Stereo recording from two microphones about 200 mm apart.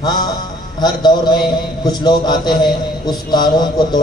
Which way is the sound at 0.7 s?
20° left (ahead or behind).